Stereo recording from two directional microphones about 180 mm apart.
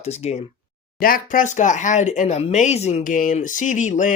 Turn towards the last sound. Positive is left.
turn(degrees=45)  # may be behind; listen again after turning